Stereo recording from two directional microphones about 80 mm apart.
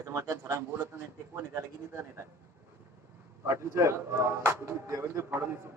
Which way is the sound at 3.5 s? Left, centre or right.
Right.